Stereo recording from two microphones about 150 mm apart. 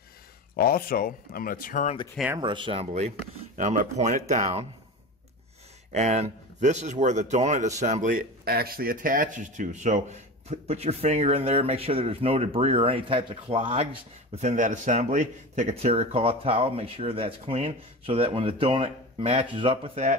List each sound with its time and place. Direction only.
0.6 s speech: 80° left; by 2.0 s 60° left (ahead or behind)
2.3 s speech: 30° right (ahead or behind)
3.5 s speech: 55° right (ahead or behind)
5.9 s speech: 50° right (ahead or behind)
14.3 s speech: 50° right (ahead or behind)